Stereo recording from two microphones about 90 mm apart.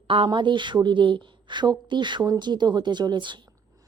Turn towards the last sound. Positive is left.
turn(degrees=-60)  # may be behind; listen again after turning